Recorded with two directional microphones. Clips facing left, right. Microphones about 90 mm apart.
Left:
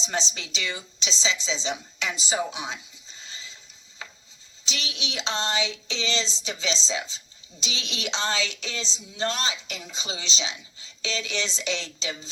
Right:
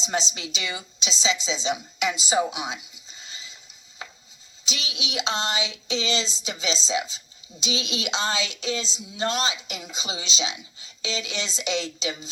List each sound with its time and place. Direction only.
0.1 s a woman's voice: 15° right (ahead or behind)
4.7 s a woman's voice: 15° right (ahead or behind)